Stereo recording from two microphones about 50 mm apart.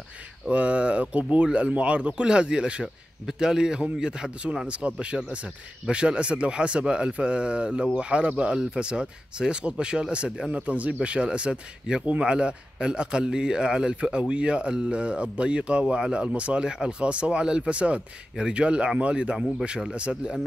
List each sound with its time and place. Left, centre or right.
0.5 s a man's voice: right